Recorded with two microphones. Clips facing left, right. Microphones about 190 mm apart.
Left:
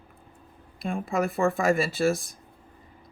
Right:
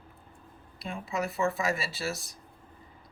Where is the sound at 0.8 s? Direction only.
50° left (ahead or behind).